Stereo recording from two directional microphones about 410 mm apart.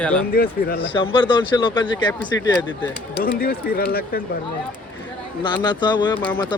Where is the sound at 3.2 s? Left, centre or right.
Left.